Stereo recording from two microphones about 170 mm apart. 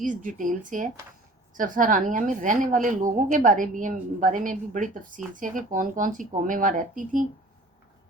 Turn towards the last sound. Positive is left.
turn(degrees=-50)  # may be behind; listen again after turning